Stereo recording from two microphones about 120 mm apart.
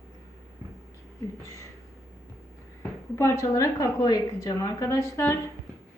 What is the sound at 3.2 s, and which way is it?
A woman's voice, 25° left (ahead or behind).